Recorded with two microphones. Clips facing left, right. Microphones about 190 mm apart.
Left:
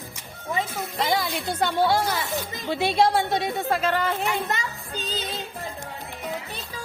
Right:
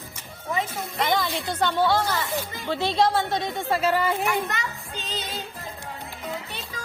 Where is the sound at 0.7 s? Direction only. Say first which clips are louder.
Even; 5° left (ahead or behind).